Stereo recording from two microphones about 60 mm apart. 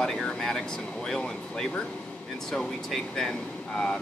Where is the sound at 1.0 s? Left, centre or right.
Centre.